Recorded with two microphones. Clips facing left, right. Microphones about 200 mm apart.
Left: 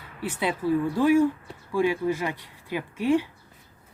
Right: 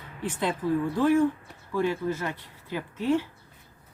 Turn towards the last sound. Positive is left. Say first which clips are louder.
# left 3 dB
turn(degrees=15)  # may be behind; listen again after turning